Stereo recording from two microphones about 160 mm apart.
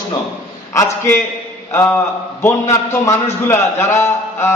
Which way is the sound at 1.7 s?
15° left (ahead or behind).